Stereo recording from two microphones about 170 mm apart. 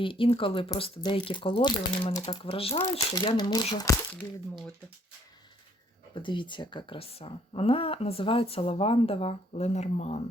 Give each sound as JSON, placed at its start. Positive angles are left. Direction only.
{"t": 0.0, "sound": "speech", "side_deg": 30}
{"t": 6.1, "sound": "speech", "side_deg": 30}